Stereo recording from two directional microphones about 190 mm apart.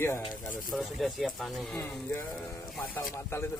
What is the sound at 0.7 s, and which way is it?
Speech, centre (ahead or behind).